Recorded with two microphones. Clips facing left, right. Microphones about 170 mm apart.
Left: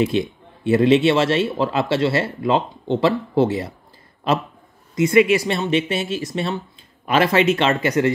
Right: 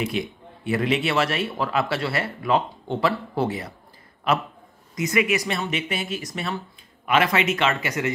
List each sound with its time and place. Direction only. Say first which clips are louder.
0.0 s speech: left 7 dB; 30° left (ahead or behind)
4.9 s speech: left 8 dB; 30° left (ahead or behind)